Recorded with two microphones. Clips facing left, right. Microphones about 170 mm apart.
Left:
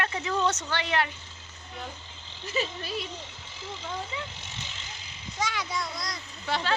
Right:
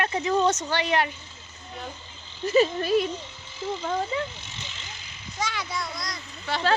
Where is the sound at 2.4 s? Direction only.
45° right (ahead or behind).